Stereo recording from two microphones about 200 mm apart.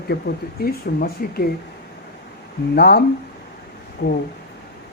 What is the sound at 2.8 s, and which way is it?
Speech, 55° left (ahead or behind).